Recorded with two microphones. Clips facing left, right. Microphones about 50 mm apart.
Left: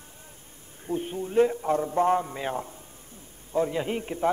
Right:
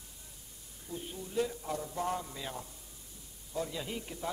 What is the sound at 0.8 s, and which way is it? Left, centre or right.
A man's voice, left.